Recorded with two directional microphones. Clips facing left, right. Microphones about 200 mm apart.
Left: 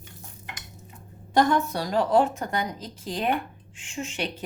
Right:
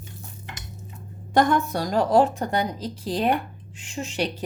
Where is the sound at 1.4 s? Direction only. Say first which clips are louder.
Right 1 dB; 50° right (ahead or behind).